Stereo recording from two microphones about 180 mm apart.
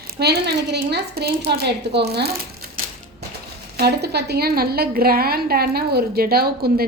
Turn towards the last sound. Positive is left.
turn(degrees=-60)  # may be behind; listen again after turning